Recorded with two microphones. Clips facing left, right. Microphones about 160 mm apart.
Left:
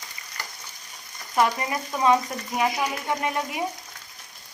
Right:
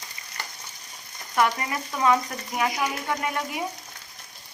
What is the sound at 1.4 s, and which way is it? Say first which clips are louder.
Stir: left 1 dB; 25° left (ahead or behind).